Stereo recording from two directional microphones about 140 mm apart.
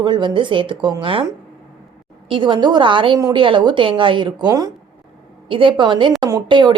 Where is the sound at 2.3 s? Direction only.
35° right (ahead or behind).